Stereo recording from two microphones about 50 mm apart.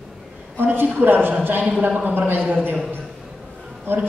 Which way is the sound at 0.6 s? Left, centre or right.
Right.